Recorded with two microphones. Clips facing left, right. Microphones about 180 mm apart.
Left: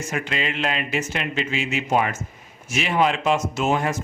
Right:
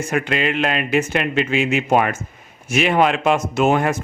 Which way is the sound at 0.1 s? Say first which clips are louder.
Right 7 dB; 55° right (ahead or behind).